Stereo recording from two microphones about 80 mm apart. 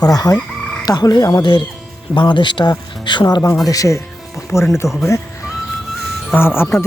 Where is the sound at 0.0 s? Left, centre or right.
Left.